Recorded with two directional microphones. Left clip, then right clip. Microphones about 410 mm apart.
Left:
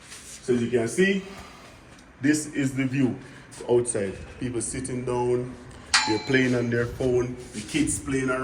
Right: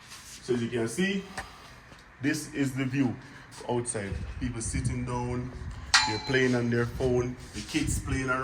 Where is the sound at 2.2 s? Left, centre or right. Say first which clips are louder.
Left 5 dB; centre.